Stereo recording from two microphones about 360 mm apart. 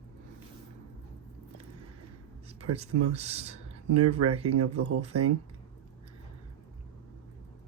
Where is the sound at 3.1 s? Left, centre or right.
Centre.